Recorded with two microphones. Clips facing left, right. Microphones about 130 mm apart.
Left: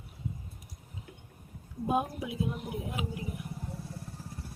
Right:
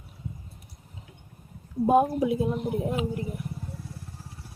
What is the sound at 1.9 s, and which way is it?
Speech, 40° right (ahead or behind).